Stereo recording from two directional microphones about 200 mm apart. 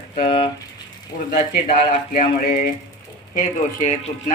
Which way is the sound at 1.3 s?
45° left (ahead or behind).